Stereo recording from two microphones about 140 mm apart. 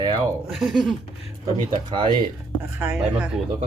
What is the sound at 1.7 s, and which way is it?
Speech, 35° right (ahead or behind).